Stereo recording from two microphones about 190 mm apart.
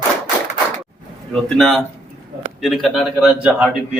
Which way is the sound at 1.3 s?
5° left (ahead or behind).